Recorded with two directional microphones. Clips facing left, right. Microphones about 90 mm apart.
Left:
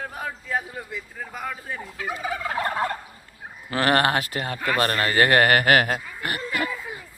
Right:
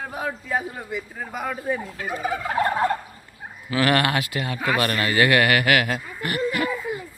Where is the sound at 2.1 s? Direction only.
45° right (ahead or behind).